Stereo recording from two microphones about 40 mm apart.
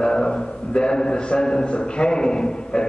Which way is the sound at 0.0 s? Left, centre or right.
Left.